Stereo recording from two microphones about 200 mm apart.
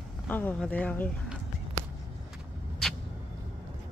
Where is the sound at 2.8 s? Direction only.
Centre (ahead or behind).